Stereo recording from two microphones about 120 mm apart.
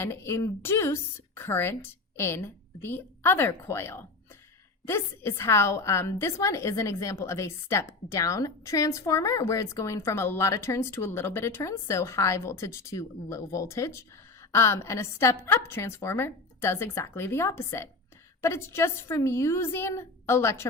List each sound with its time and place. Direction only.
0.0 s a woman's voice: 20° left (ahead or behind)